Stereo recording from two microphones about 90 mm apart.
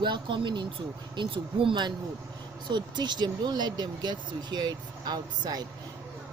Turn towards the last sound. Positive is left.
turn(degrees=-50)  # may be behind; listen again after turning